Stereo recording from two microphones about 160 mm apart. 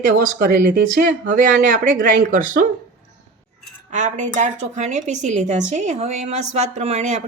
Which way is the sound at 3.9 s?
50° right (ahead or behind).